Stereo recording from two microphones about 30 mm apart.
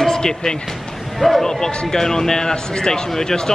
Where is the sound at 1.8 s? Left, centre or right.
Centre.